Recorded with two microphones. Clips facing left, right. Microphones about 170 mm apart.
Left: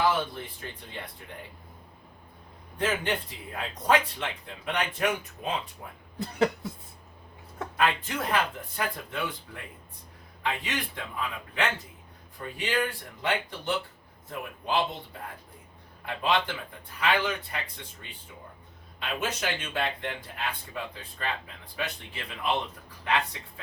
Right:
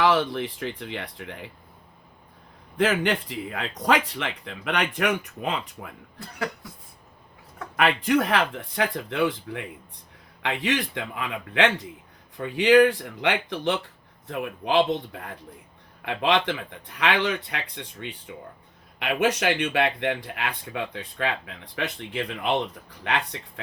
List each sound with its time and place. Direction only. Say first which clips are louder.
0.0 s speech: right 5 dB; 90° right
2.7 s speech: right 6 dB; 80° right
6.1 s a sound: left 6 dB; 25° left (ahead or behind)
7.8 s speech: right 7 dB; 80° right